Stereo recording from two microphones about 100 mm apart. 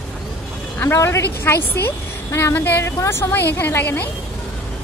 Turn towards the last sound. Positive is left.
turn(degrees=20)  # may be behind; listen again after turning